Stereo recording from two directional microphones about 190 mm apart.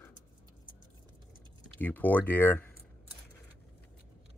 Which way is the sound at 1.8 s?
10° left (ahead or behind).